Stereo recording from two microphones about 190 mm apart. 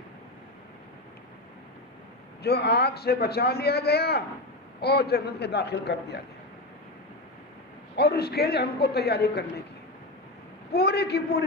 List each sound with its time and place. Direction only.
2.4 s a man's voice: 60° left (ahead or behind)
7.9 s a man's voice: 60° left (ahead or behind)
10.7 s a man's voice: 55° left (ahead or behind)